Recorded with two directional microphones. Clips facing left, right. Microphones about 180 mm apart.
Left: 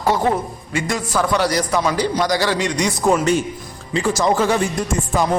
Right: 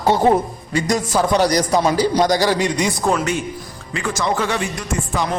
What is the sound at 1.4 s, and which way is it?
Speech, 40° right (ahead or behind).